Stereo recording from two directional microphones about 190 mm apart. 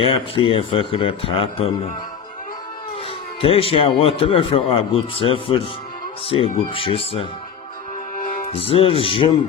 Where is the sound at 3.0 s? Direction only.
30° left (ahead or behind).